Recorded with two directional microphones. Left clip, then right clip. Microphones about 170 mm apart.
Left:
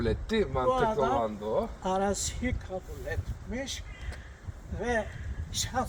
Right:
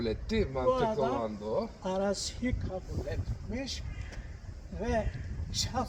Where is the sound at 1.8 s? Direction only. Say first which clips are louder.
Left 3 dB; 20° left (ahead or behind).